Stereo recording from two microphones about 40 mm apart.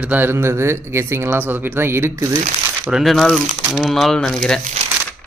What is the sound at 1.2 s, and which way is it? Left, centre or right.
Speech, right.